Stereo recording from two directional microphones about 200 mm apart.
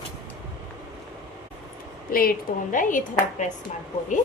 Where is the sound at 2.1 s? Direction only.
45° left (ahead or behind).